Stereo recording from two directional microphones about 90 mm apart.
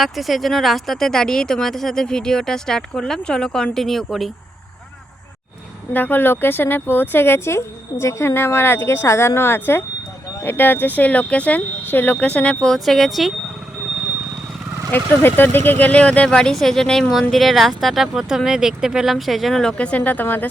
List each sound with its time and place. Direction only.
0.0 s speech: centre (ahead or behind)
5.9 s speech: 20° left (ahead or behind); by 13.3 s centre (ahead or behind)
14.8 s speech: 20° left (ahead or behind)